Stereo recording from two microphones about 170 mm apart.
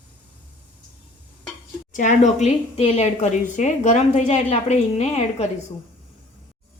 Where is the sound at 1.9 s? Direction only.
50° left (ahead or behind).